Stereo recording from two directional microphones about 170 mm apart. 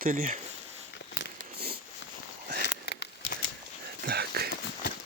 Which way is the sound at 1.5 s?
65° right (ahead or behind).